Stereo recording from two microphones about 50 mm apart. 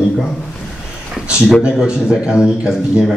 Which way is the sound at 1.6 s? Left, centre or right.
Centre.